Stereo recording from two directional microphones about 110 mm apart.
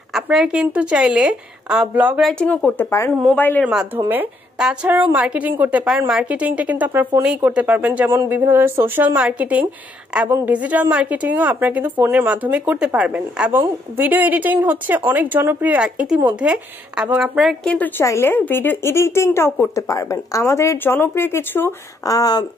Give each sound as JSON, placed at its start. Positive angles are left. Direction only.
{"t": 0.1, "sound": "a woman's voice", "side_deg": -5}
{"t": 2.8, "sound": "a woman's voice", "side_deg": 25}
{"t": 3.6, "sound": "a woman's voice", "side_deg": -10}
{"t": 17.6, "sound": "a woman's voice", "side_deg": 15}
{"t": 22.1, "sound": "speech", "side_deg": 35}